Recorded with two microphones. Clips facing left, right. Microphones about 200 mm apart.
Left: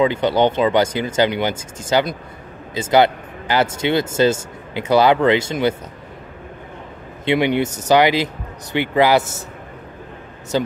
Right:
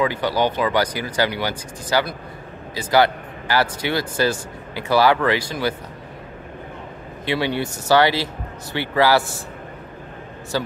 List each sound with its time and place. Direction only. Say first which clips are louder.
0.0 s speech: left 4 dB; 20° left (ahead or behind)
7.2 s speech: left 5 dB; 20° left (ahead or behind)
10.5 s speech: left 4 dB; 20° left (ahead or behind)